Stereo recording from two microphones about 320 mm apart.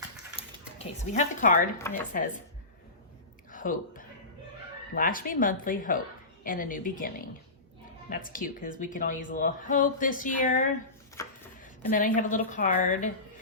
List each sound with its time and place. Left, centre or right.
0.4 s a sound: centre
0.8 s speech: left
3.5 s speech: left
8.1 s speech: left
11.2 s a sound: centre
11.9 s speech: left